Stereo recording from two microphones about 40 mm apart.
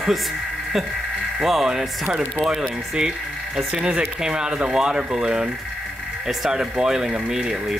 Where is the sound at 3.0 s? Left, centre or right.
Centre.